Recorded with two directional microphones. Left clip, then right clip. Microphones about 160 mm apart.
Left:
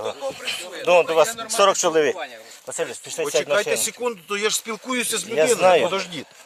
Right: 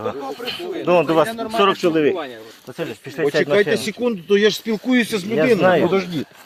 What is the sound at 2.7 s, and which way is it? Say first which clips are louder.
Speech: left 1 dB; 25° left (ahead or behind).